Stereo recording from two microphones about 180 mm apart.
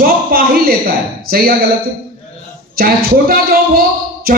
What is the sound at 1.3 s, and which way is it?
Speech, 55° right (ahead or behind).